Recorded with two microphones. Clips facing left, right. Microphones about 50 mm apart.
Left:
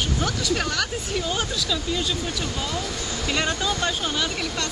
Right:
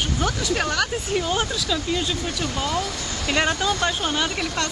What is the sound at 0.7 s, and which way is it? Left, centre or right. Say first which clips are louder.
Speech: right 3 dB; centre.